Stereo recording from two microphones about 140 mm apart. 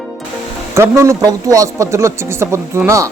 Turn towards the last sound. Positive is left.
turn(degrees=-20)  # may be behind; listen again after turning